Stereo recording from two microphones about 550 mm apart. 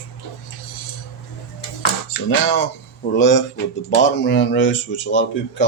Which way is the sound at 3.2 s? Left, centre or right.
Centre.